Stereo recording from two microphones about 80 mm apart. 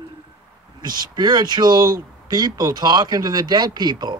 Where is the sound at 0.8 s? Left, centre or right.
Right.